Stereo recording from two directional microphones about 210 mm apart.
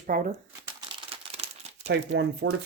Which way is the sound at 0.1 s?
40° right (ahead or behind).